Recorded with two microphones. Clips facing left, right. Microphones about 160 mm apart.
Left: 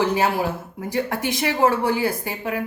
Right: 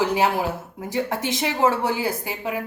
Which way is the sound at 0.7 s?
20° right (ahead or behind).